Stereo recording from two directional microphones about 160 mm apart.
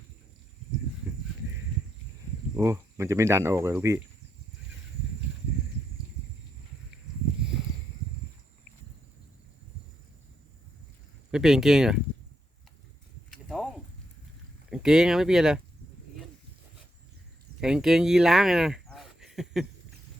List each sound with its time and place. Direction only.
2.6 s speech: 20° right (ahead or behind)
11.3 s speech: 5° right (ahead or behind)
13.3 s a sound: centre (ahead or behind)
14.7 s speech: 5° right (ahead or behind)
17.6 s speech: 5° right (ahead or behind)